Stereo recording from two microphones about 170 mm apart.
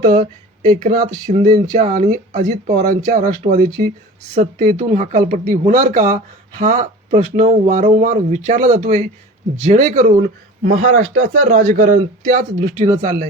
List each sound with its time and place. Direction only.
0.0 s speech: 50° right (ahead or behind)